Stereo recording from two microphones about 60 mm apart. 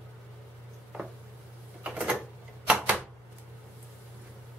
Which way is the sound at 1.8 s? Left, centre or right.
Centre.